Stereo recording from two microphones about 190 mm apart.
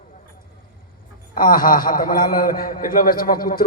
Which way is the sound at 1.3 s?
50° left (ahead or behind).